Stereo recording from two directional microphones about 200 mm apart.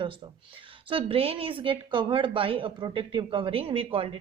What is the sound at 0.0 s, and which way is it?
A woman's voice, 25° right (ahead or behind).